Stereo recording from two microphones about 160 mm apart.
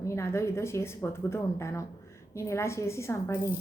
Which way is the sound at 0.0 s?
15° left (ahead or behind).